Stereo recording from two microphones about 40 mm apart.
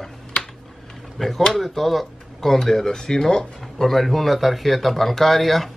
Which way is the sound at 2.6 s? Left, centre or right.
Centre.